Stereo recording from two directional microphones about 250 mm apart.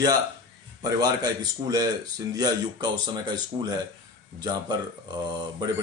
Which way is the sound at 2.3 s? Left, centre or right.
Centre.